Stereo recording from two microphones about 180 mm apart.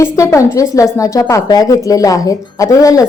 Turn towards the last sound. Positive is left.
turn(degrees=20)  # may be behind; listen again after turning